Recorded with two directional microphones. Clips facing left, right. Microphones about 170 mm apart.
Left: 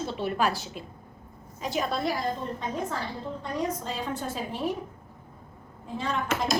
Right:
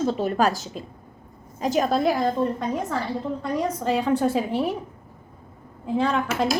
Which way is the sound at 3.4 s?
85° right.